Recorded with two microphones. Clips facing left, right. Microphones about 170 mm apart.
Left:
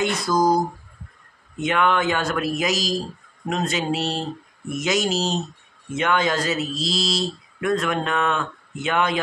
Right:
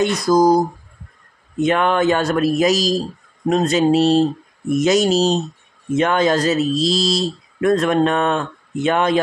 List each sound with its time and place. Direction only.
0.0 s speech: 40° right (ahead or behind)
1.6 s speech: 40° right (ahead or behind)